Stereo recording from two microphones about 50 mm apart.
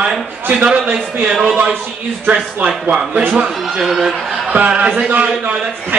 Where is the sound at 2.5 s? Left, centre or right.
Right.